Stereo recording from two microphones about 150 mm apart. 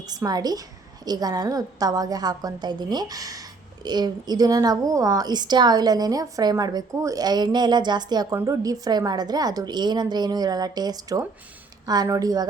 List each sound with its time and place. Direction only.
0.0 s a woman's voice: 25° right (ahead or behind)